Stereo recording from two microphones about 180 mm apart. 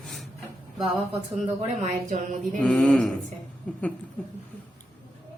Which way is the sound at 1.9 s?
40° right (ahead or behind).